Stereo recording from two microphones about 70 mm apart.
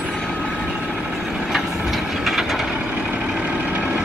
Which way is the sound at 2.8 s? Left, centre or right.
Centre.